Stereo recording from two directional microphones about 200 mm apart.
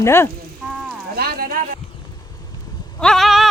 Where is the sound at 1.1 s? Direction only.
50° right (ahead or behind).